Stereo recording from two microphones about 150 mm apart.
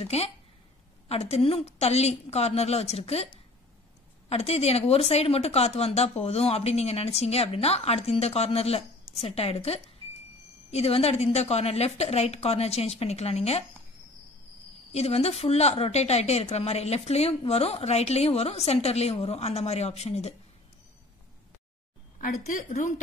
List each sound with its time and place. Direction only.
0.0 s speech: 45° left (ahead or behind)
4.3 s speech: 45° left (ahead or behind)
14.9 s speech: 45° left (ahead or behind)
22.2 s a woman's voice: 60° left (ahead or behind)